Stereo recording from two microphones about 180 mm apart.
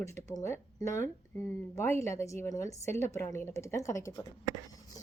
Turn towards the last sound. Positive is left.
turn(degrees=20)  # may be behind; listen again after turning